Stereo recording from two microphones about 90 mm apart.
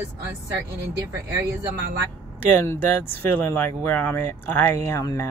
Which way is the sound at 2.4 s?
25° left (ahead or behind).